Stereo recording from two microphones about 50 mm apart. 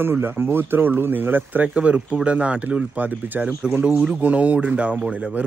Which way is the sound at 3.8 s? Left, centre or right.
Right.